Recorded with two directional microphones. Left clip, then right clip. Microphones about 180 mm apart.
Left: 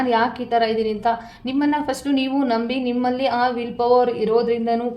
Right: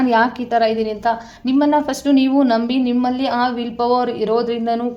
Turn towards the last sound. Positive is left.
turn(degrees=-30)  # may be behind; listen again after turning